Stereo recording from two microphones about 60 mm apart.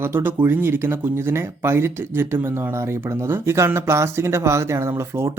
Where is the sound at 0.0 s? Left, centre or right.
Right.